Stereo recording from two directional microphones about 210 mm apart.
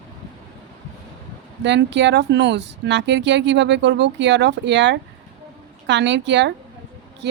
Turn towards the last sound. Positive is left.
turn(degrees=-55)  # may be behind; listen again after turning